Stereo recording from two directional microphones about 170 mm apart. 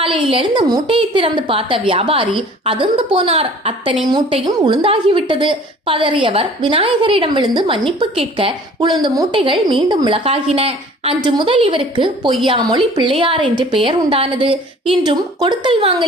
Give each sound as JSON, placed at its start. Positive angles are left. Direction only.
{"t": 0.0, "sound": "a woman's voice", "side_deg": -30}